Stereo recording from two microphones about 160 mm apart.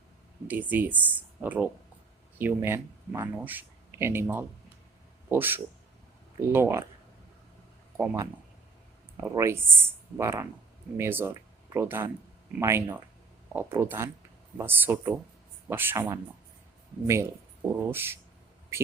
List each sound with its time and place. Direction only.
0.4 s speech: 10° right (ahead or behind)
7.9 s speech: 15° right (ahead or behind)
9.3 s speech: 15° right (ahead or behind)